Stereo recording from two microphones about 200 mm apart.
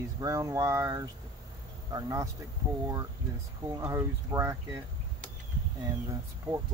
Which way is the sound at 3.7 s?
15° right (ahead or behind).